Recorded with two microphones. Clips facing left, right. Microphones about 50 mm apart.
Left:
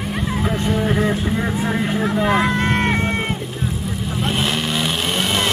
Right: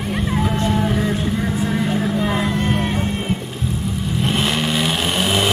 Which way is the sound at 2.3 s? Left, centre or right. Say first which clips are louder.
Left 3 dB; left.